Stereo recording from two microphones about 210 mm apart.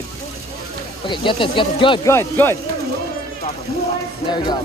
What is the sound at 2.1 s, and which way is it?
Speech, 10° left (ahead or behind).